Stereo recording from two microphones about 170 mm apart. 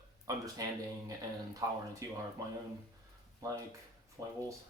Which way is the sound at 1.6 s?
20° right (ahead or behind).